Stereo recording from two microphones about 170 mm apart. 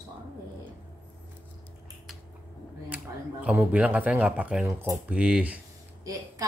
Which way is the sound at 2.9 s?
5° right (ahead or behind).